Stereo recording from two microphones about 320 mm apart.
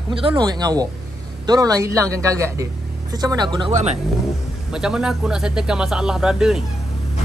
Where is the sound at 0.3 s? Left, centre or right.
Centre.